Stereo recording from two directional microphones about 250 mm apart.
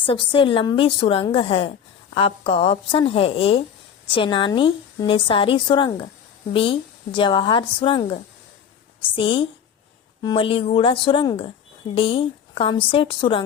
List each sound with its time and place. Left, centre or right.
0.0 s a woman's voice: left